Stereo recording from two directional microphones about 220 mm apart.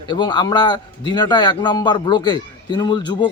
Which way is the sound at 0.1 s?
20° left (ahead or behind).